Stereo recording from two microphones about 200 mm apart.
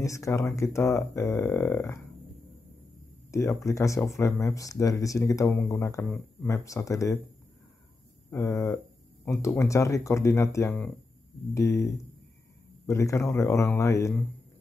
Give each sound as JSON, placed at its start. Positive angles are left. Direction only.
{"t": 0.0, "sound": "speech", "side_deg": 15}
{"t": 3.3, "sound": "speech", "side_deg": 15}
{"t": 8.3, "sound": "speech", "side_deg": 15}